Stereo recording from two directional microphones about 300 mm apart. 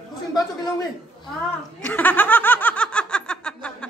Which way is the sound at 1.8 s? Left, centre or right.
Centre.